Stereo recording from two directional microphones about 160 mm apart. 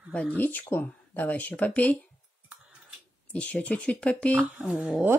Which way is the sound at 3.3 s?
5° left (ahead or behind).